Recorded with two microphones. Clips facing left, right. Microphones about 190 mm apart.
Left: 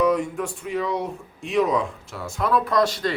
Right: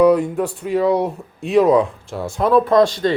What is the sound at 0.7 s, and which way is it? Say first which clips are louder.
Speech: right 10 dB; 35° right (ahead or behind).